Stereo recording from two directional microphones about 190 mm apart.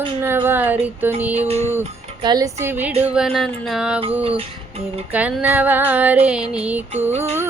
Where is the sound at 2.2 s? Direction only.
20° right (ahead or behind).